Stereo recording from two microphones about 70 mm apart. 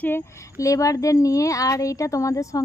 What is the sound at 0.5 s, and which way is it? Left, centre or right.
Speech, left.